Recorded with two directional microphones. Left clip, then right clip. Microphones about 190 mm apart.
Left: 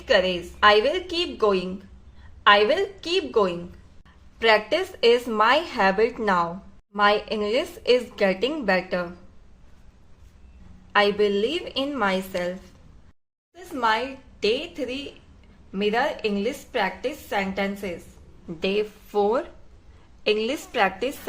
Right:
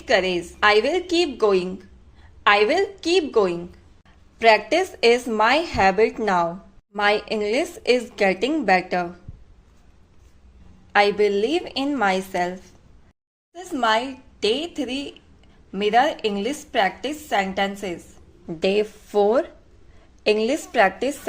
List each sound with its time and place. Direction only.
0.0 s a woman's voice: 25° right (ahead or behind)
10.9 s a woman's voice: 25° right (ahead or behind)